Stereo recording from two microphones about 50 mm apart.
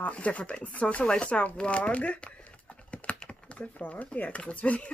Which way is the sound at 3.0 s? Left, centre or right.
Left.